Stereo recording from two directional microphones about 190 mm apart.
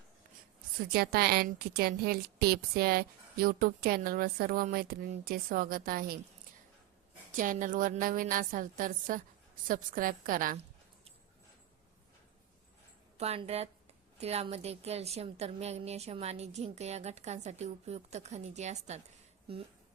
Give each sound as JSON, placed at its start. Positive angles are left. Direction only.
{"t": 0.9, "sound": "a woman's voice", "side_deg": -55}
{"t": 7.3, "sound": "a woman's voice", "side_deg": -45}
{"t": 13.1, "sound": "a woman's voice", "side_deg": -30}